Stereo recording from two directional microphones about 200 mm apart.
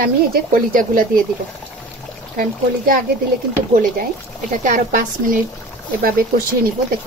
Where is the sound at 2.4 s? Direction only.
45° right (ahead or behind).